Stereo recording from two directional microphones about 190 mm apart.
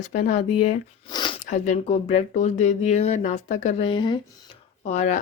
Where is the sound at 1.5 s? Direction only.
40° left (ahead or behind).